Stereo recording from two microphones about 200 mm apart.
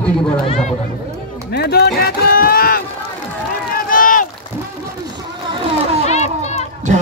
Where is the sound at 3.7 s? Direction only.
45° left (ahead or behind).